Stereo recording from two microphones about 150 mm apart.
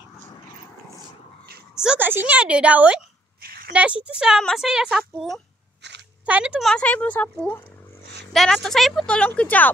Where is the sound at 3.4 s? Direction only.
85° right.